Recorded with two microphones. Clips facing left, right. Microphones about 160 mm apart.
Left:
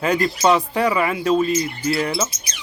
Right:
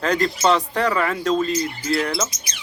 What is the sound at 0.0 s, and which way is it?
Speech, 10° left (ahead or behind).